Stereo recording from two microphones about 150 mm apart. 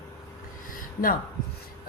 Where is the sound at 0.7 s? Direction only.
65° left (ahead or behind).